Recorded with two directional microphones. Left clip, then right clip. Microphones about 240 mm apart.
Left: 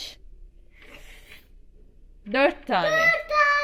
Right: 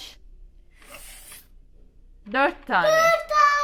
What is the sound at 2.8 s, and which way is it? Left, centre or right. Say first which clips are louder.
Speech: right 3 dB; right.